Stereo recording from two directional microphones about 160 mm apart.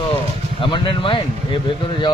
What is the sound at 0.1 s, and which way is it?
Speech, 30° left (ahead or behind).